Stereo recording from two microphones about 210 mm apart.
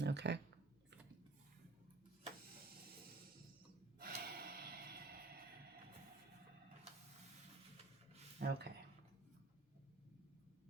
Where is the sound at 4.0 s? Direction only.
45° right (ahead or behind).